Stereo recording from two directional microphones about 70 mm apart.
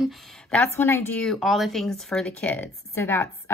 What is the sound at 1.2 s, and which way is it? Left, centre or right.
Speech, centre.